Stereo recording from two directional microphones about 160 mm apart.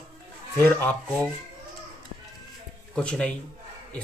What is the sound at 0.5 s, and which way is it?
Speech, 10° left (ahead or behind).